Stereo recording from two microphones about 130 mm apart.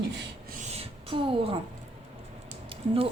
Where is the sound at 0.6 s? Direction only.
50° right (ahead or behind).